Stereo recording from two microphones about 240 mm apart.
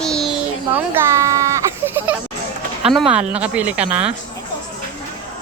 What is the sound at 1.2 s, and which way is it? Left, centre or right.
A child's voice, centre.